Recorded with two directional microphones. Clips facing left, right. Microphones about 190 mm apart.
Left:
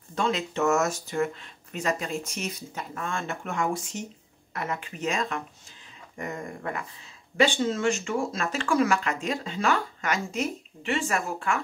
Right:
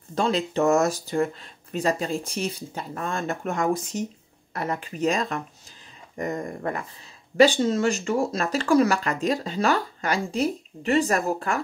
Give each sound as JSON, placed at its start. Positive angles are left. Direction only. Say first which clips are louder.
{"t": 0.1, "sound": "speech", "louder": "right 4 dB", "side_deg": -35}